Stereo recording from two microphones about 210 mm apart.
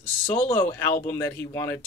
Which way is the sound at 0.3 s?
10° left (ahead or behind).